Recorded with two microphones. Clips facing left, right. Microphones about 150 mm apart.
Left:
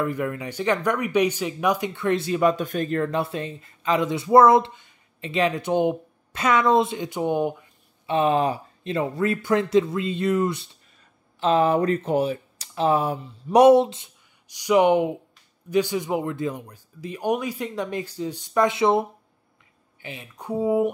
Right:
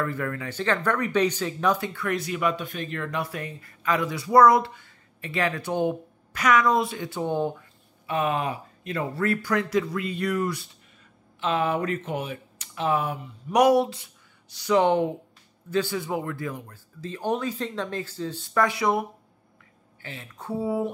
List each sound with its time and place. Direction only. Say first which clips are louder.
0.0 s speech: left 3 dB; 15° left (ahead or behind)
2.5 s speech: left 7 dB; 45° left (ahead or behind); by 7.6 s 15° left (ahead or behind)
8.1 s speech: left 5 dB; 30° left (ahead or behind)
11.3 s speech: left 6 dB; 35° left (ahead or behind); by 20.9 s 15° left (ahead or behind)